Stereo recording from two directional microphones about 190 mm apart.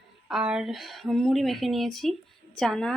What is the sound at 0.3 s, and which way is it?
A woman's voice, 5° right (ahead or behind).